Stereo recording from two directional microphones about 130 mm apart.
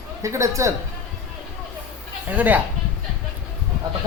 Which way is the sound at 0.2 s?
25° right (ahead or behind).